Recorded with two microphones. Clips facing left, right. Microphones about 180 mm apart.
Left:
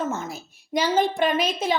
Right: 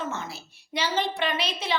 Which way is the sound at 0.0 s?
45° left (ahead or behind).